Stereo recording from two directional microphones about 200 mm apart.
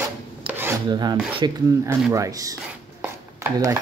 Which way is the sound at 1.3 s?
20° right (ahead or behind).